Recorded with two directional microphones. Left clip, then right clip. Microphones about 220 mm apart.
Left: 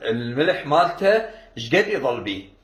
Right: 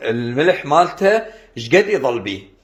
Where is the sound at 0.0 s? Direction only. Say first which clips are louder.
Right 5 dB; 50° right (ahead or behind).